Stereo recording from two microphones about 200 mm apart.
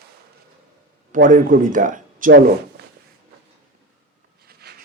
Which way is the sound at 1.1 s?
40° right (ahead or behind).